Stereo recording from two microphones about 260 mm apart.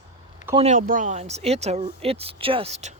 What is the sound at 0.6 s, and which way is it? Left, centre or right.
Speech, right.